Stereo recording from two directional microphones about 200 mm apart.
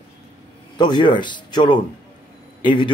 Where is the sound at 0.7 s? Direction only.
20° left (ahead or behind).